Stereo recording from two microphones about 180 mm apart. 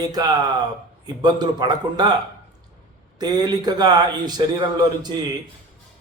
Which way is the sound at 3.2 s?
20° right (ahead or behind).